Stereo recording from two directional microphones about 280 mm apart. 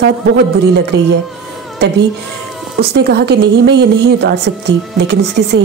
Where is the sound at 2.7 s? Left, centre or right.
Right.